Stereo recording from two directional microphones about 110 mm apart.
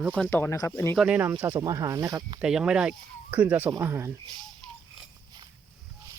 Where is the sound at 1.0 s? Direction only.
15° right (ahead or behind).